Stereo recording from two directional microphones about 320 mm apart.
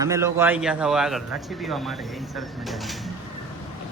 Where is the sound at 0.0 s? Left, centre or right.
Centre.